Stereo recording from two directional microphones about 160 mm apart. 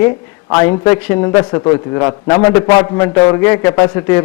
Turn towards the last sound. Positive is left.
turn(degrees=15)  # may be behind; listen again after turning